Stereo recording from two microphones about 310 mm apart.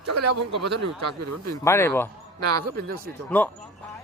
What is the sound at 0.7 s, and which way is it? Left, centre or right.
Speech, right.